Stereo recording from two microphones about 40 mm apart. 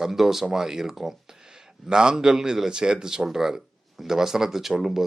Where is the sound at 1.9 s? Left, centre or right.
Centre.